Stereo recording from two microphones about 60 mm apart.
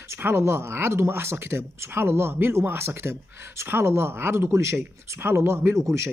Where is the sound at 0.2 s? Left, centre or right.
Right.